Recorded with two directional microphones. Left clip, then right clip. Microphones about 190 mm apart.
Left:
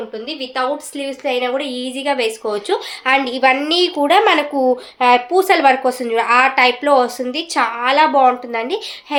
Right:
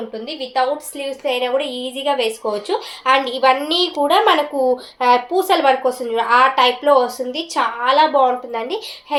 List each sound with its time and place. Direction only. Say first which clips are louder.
0.3 s speech: right 1 dB; 25° left (ahead or behind)